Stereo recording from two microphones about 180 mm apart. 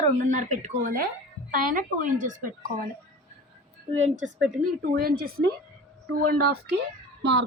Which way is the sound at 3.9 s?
40° right (ahead or behind).